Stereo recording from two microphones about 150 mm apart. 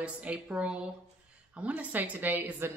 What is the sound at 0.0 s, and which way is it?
Speech, 10° right (ahead or behind).